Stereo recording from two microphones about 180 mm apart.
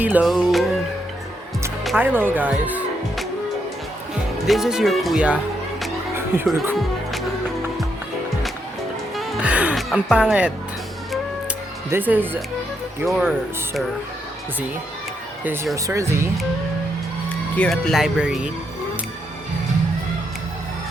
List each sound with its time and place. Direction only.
0.0 s music: 5° right (ahead or behind)
2.0 s speech: 10° right (ahead or behind)
4.4 s speech: centre (ahead or behind)
9.1 s music: 5° right (ahead or behind)
11.9 s speech: 10° right (ahead or behind)
15.7 s speech: 15° right (ahead or behind)
17.6 s speech: centre (ahead or behind)